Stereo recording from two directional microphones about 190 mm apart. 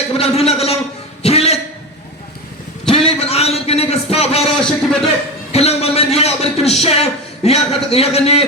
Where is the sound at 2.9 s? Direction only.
30° left (ahead or behind).